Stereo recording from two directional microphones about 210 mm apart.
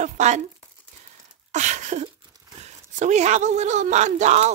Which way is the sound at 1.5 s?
35° right (ahead or behind).